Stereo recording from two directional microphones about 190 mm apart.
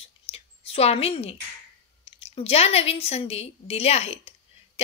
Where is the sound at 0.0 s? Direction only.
30° left (ahead or behind).